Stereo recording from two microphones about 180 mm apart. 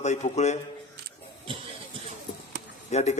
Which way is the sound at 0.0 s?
40° left (ahead or behind).